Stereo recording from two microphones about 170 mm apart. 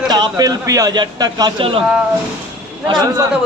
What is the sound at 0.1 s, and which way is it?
A man's voice, 20° right (ahead or behind).